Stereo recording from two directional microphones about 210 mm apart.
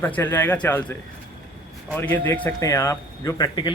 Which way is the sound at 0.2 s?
10° left (ahead or behind).